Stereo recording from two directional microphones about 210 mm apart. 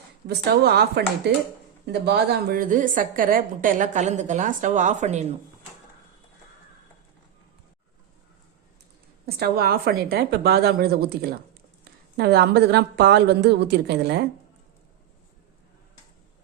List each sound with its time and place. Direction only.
0.3 s a woman's voice: 50° right (ahead or behind); by 5.2 s 35° right (ahead or behind)
9.2 s a woman's voice: 45° right (ahead or behind)